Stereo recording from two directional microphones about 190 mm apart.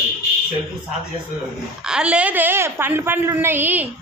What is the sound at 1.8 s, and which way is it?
A woman's voice, 5° right (ahead or behind).